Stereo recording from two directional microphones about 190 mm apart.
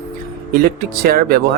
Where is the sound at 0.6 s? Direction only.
50° right (ahead or behind).